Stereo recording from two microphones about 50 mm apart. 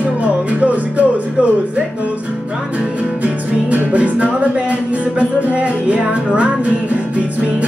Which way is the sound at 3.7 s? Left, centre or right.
Right.